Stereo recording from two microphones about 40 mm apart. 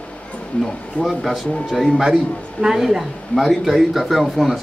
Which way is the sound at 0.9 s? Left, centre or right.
Left.